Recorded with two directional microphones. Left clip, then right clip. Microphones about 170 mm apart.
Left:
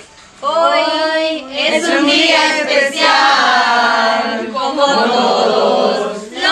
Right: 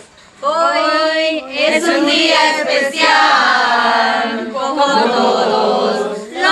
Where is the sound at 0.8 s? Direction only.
60° right (ahead or behind).